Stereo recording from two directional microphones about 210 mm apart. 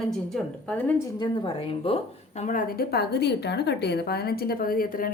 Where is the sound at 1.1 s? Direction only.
20° left (ahead or behind).